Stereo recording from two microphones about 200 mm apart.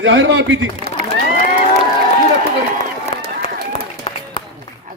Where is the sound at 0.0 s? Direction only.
70° right (ahead or behind).